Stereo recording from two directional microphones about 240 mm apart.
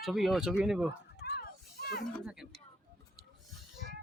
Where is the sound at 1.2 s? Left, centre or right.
Left.